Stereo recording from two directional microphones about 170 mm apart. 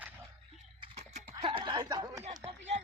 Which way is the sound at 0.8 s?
40° right (ahead or behind).